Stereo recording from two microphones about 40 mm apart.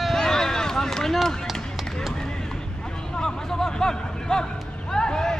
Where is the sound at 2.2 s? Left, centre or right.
Centre.